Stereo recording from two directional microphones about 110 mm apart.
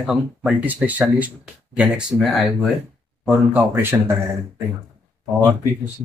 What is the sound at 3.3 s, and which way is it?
Speech, 20° right (ahead or behind).